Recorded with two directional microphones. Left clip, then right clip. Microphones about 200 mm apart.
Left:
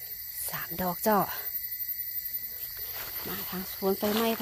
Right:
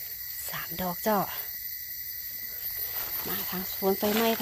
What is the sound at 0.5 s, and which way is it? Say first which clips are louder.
Speech: left 1 dB; 20° left (ahead or behind).